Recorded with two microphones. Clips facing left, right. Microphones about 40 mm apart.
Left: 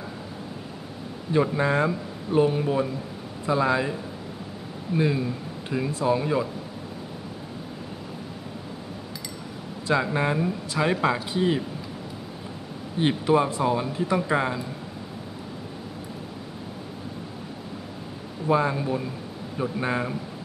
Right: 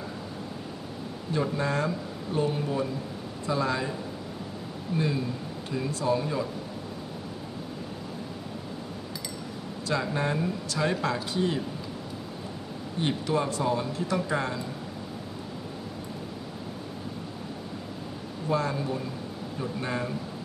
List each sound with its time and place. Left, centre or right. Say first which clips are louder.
1.3 s speech: left 6 dB; left
4.9 s speech: left 5 dB; centre
9.8 s speech: left 5 dB; left
13.1 s speech: left 6 dB; left
18.5 s speech: left 5 dB; left